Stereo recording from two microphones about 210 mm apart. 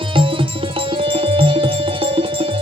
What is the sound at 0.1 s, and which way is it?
Music, 25° right (ahead or behind).